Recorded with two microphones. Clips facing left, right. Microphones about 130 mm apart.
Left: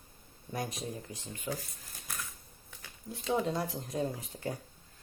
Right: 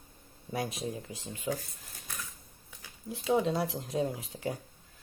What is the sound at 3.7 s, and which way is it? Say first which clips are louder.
Speech: right 3 dB; centre (ahead or behind).